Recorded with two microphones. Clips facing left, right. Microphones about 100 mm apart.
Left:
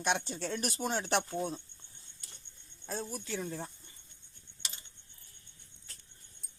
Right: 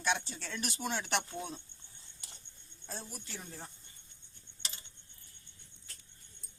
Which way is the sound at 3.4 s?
70° left (ahead or behind).